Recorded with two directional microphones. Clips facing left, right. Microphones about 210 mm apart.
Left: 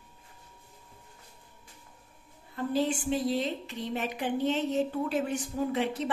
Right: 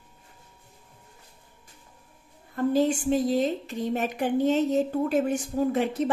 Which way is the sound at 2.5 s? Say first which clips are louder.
Right 6 dB; 45° right (ahead or behind).